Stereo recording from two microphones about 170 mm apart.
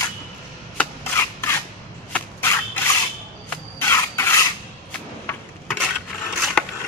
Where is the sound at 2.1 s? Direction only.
10° left (ahead or behind).